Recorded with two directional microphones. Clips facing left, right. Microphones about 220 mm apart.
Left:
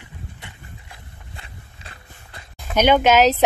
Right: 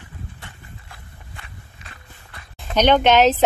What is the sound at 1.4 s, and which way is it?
Walk, 30° left (ahead or behind).